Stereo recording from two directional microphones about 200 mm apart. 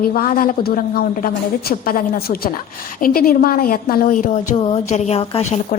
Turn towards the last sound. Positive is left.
turn(degrees=35)  # may be behind; listen again after turning